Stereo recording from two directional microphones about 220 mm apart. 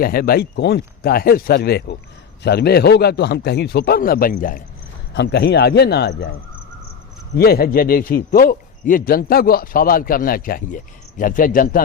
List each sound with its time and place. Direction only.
0.0 s a man's voice: 40° left (ahead or behind)
5.1 s a man's voice: 50° left (ahead or behind)
7.3 s speech: 45° left (ahead or behind)